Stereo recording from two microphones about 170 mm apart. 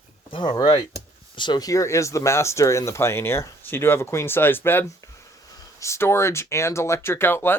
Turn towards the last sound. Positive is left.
turn(degrees=15)  # may be behind; listen again after turning